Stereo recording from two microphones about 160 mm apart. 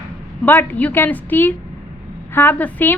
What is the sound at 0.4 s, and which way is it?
A woman's voice, 10° left (ahead or behind).